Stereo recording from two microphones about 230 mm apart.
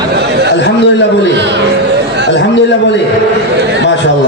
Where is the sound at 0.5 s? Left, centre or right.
Left.